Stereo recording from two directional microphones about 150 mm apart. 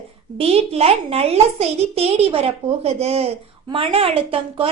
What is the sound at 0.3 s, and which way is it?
A child's voice, 40° right (ahead or behind).